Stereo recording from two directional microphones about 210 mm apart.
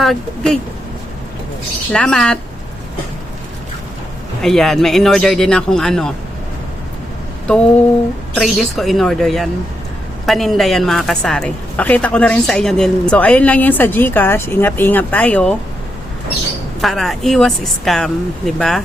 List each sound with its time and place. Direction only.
0.0 s speech: centre (ahead or behind)
1.9 s speech: 5° left (ahead or behind)
4.4 s speech: centre (ahead or behind)
8.4 s a woman's voice: centre (ahead or behind)
16.8 s speech: centre (ahead or behind)